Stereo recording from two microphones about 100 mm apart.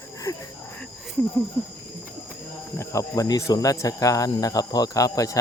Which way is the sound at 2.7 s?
30° left (ahead or behind).